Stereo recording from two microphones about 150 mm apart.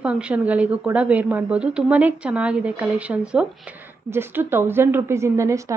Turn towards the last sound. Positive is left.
turn(degrees=-20)  # may be behind; listen again after turning